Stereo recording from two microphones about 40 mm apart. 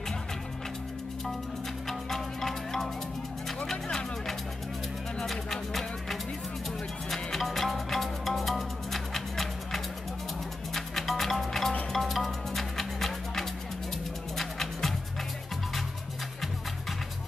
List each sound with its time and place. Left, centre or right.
1.9 s music: centre
5.2 s music: centre